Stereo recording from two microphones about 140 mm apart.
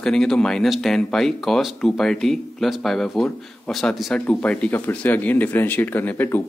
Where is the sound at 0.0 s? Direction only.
5° left (ahead or behind).